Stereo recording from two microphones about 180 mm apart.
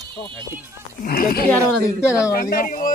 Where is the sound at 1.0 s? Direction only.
55° left (ahead or behind).